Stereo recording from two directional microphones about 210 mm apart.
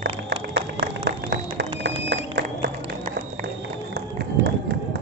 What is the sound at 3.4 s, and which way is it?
Run, 50° right (ahead or behind).